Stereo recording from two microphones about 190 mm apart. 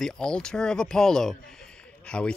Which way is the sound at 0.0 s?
5° left (ahead or behind).